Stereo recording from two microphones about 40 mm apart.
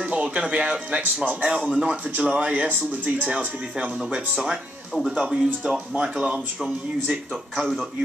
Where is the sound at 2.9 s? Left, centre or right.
Right.